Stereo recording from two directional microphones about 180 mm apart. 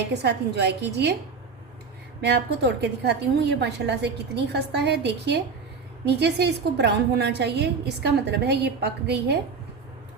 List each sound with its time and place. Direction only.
0.0 s a woman's voice: 65° right (ahead or behind)
2.2 s a woman's voice: 70° right (ahead or behind)